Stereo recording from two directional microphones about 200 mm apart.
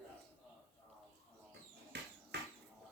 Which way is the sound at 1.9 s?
55° right (ahead or behind).